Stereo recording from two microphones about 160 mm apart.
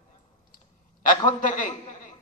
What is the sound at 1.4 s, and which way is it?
Speech, 55° left (ahead or behind).